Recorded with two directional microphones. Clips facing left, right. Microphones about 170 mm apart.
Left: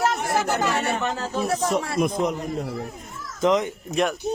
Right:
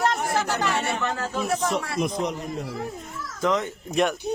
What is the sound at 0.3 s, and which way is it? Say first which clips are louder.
Speech: left 2 dB; 10° left (ahead or behind).